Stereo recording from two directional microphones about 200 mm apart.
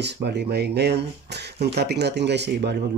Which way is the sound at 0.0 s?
55° right (ahead or behind).